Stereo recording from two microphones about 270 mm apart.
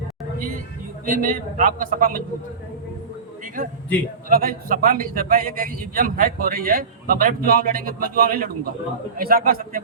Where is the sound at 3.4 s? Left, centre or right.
Right.